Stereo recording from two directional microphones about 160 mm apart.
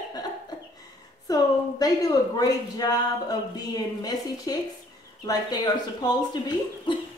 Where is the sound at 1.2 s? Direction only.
25° left (ahead or behind).